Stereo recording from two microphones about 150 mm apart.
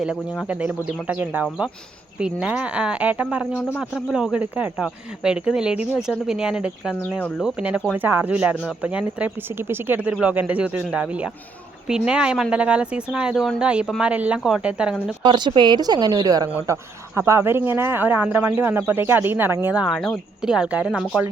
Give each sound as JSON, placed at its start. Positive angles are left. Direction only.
{"t": 0.0, "sound": "speech", "side_deg": -5}
{"t": 7.2, "sound": "speech", "side_deg": 10}
{"t": 7.4, "sound": "speech", "side_deg": -5}
{"t": 15.2, "sound": "speech", "side_deg": -30}
{"t": 19.8, "sound": "speech", "side_deg": 0}